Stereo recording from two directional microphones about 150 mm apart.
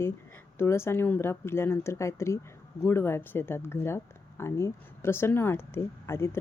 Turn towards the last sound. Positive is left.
turn(degrees=15)  # may be behind; listen again after turning